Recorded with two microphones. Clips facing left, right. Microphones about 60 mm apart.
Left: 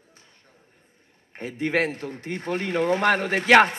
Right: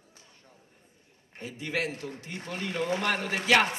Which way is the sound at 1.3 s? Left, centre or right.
Left.